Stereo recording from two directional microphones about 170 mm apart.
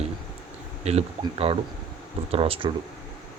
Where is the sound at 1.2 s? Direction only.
35° right (ahead or behind).